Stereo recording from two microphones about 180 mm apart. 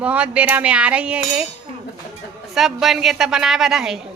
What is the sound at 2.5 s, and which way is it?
A woman's voice, centre (ahead or behind).